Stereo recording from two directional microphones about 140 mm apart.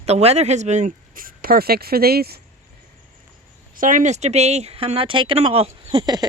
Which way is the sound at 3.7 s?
70° right (ahead or behind).